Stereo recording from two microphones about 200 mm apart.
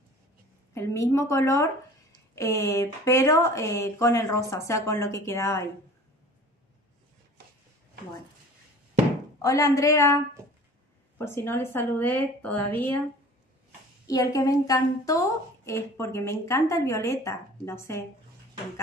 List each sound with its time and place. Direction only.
0.7 s a woman's voice: 15° left (ahead or behind)
9.4 s a woman's voice: 15° left (ahead or behind)
14.0 s a woman's voice: 15° left (ahead or behind)